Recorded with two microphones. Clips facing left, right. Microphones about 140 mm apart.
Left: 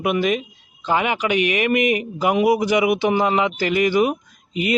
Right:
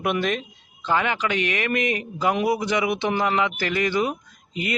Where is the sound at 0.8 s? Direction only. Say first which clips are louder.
Left 3 dB; 15° left (ahead or behind).